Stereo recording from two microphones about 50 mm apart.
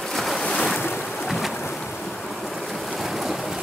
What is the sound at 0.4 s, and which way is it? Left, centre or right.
Boat, left.